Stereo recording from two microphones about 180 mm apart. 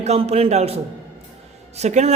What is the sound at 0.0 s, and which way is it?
Speech, 35° right (ahead or behind).